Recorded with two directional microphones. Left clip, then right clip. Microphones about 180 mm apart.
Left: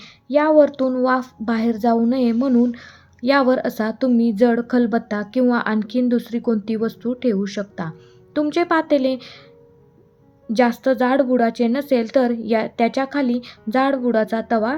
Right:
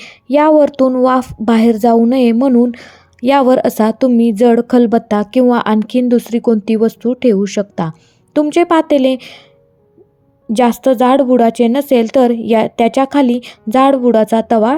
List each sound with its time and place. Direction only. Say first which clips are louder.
0.0 s a woman's voice: right 7 dB; 45° right (ahead or behind)
10.5 s speech: right 6 dB; 40° right (ahead or behind)